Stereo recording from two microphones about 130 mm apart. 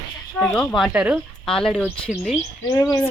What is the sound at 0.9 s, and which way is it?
Speech, 10° right (ahead or behind).